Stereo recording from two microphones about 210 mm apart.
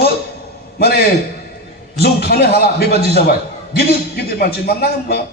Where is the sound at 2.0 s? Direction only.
50° left (ahead or behind).